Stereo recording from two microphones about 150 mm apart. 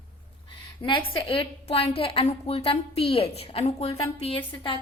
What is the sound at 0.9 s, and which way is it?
A woman's voice, 35° left (ahead or behind).